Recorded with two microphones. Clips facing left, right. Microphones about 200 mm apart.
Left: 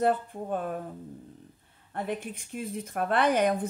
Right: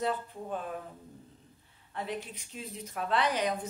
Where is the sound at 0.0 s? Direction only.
55° left (ahead or behind).